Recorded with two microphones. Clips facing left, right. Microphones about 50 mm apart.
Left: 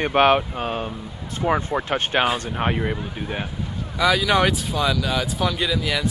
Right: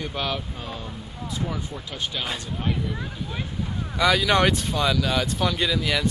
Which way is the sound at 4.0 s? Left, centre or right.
Centre.